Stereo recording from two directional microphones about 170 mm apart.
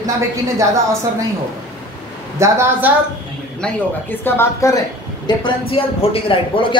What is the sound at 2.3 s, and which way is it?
Speech, 15° right (ahead or behind).